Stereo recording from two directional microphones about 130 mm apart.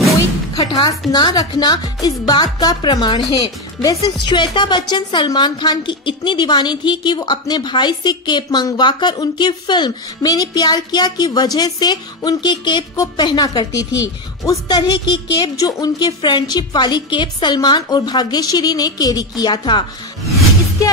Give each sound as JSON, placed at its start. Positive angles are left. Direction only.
{"t": 0.6, "sound": "music", "side_deg": 35}
{"t": 1.1, "sound": "a woman's voice", "side_deg": 30}